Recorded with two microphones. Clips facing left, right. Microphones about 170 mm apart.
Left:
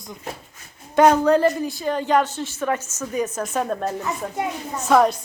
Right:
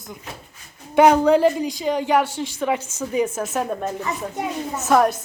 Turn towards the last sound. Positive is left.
turn(degrees=-5)  # may be behind; listen again after turning